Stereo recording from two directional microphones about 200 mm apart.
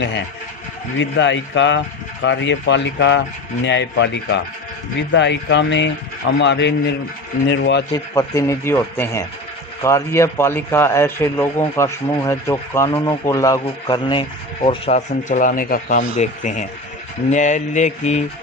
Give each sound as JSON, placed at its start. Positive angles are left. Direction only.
{"t": 0.0, "sound": "speech", "side_deg": 65}
{"t": 7.9, "sound": "a man's voice", "side_deg": 15}
{"t": 17.3, "sound": "mantra", "side_deg": 35}